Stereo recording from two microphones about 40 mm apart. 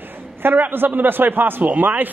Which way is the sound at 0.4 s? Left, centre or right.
Right.